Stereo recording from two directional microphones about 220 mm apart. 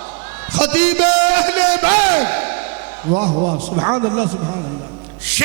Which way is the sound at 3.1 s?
30° right (ahead or behind).